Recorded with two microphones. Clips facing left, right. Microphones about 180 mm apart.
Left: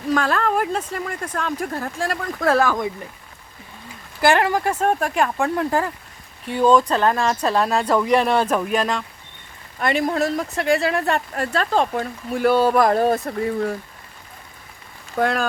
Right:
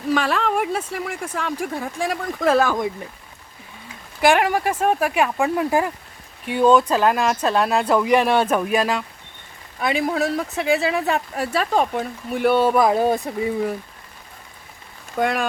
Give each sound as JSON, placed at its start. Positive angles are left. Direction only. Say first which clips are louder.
{"t": 0.1, "sound": "speech", "louder": "even", "side_deg": -5}
{"t": 2.4, "sound": "speech", "louder": "right 1 dB", "side_deg": -20}
{"t": 4.2, "sound": "speech", "louder": "even", "side_deg": 0}
{"t": 4.4, "sound": "speech", "louder": "even", "side_deg": -10}
{"t": 15.1, "sound": "speech", "louder": "left 1 dB", "side_deg": 0}